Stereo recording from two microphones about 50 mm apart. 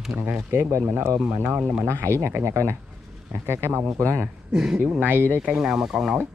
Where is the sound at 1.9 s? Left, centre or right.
Right.